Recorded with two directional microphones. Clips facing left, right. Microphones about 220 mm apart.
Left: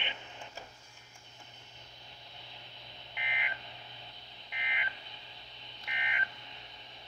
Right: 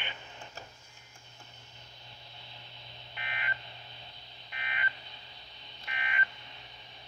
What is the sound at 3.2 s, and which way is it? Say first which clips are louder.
Telephone dialing: right 1 dB; 15° left (ahead or behind).